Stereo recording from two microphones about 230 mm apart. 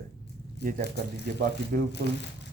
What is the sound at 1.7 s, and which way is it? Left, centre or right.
Speech, right.